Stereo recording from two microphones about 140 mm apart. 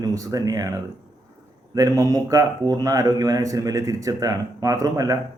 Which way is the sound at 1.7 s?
25° right (ahead or behind).